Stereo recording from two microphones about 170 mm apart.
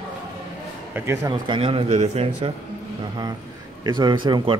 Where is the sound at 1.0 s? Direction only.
20° right (ahead or behind); by 2.5 s 40° right (ahead or behind).